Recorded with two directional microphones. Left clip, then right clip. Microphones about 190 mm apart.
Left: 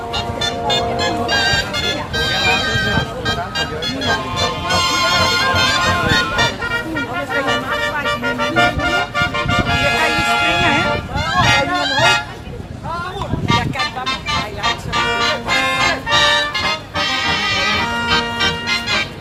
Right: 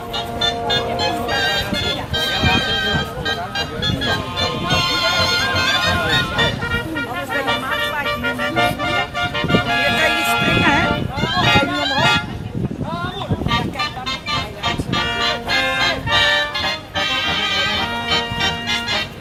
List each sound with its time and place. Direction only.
1.7 s music: 45° left (ahead or behind)
10.6 s music: 50° right (ahead or behind)
11.3 s music: 45° left (ahead or behind)
13.5 s music: 40° left (ahead or behind)